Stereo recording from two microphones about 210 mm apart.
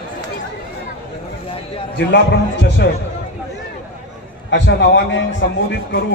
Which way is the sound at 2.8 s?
55° left (ahead or behind).